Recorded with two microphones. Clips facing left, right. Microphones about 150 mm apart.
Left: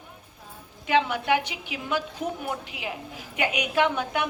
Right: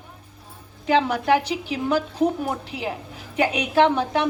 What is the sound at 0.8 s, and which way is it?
A woman's voice, 35° right (ahead or behind).